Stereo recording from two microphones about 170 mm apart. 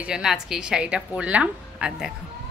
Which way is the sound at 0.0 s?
5° right (ahead or behind).